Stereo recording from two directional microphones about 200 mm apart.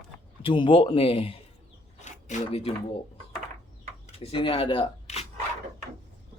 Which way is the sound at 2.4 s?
30° left (ahead or behind).